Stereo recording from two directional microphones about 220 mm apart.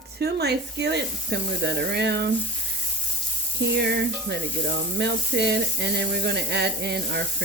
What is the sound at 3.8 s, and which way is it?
Speech, 50° right (ahead or behind).